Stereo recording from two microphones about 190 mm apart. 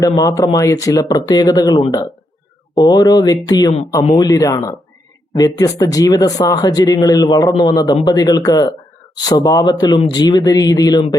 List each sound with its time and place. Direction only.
0.0 s speech: 20° left (ahead or behind)